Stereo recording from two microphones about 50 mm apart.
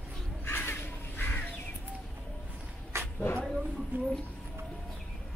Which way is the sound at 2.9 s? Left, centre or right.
Right.